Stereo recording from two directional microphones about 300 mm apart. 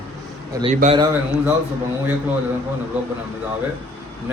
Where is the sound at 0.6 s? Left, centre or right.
Right.